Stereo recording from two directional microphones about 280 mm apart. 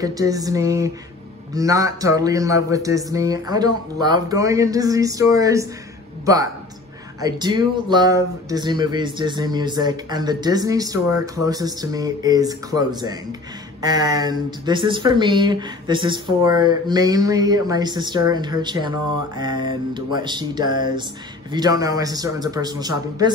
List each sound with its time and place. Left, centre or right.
0.0 s speech: centre